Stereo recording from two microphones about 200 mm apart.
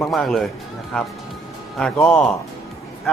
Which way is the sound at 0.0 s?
Centre (ahead or behind).